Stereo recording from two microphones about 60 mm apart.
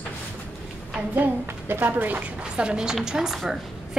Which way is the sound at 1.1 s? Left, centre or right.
Right.